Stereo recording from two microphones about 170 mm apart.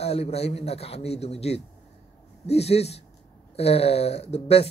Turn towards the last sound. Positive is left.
turn(degrees=40)  # may be behind; listen again after turning